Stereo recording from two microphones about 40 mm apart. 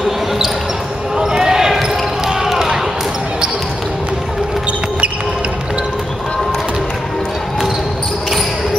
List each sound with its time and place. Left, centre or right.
1.1 s basketball bounce: centre